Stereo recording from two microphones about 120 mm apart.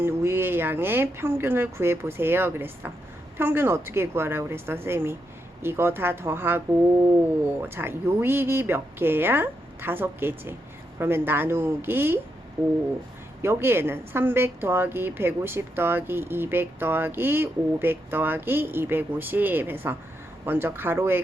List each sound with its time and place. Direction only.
0.0 s speech: 20° right (ahead or behind)
7.6 s a woman's voice: 20° right (ahead or behind)
13.4 s a woman's voice: 20° right (ahead or behind)